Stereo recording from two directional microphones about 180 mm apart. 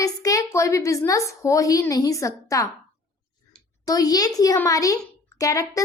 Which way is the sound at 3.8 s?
20° left (ahead or behind).